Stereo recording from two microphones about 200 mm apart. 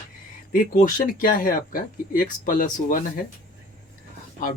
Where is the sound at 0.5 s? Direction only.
45° left (ahead or behind).